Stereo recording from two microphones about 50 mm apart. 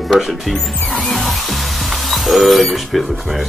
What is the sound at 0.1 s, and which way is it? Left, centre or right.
Speech, centre.